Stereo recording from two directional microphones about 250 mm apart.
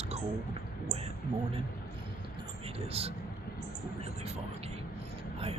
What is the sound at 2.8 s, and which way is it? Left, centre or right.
Speech, right.